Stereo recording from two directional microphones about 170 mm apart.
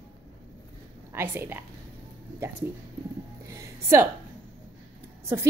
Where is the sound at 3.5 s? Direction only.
15° right (ahead or behind).